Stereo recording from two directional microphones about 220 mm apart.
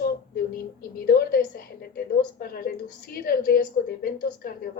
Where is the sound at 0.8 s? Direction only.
45° left (ahead or behind).